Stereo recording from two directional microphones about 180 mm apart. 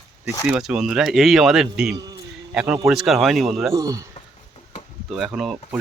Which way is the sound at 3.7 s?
20° right (ahead or behind).